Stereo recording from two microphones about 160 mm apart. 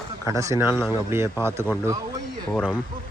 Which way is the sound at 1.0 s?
15° right (ahead or behind).